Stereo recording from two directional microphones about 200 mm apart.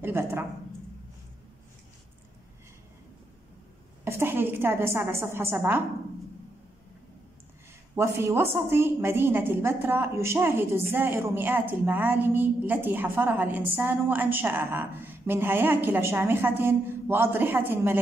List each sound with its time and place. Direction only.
0.0 s a woman's voice: 10° right (ahead or behind)
4.0 s a woman's voice: 10° right (ahead or behind)
7.9 s a woman's voice: 10° right (ahead or behind)